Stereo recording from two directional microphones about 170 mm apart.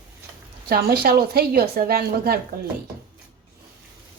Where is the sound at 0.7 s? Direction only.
65° right (ahead or behind).